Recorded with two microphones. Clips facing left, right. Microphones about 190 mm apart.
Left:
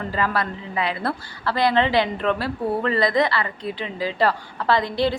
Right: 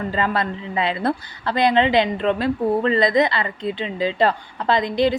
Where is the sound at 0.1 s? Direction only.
25° right (ahead or behind).